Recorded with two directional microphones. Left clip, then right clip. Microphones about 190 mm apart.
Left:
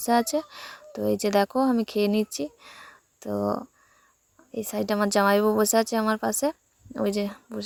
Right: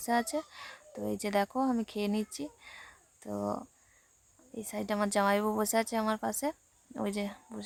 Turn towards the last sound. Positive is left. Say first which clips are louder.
# left 8 dB
turn(degrees=25)  # may be behind; listen again after turning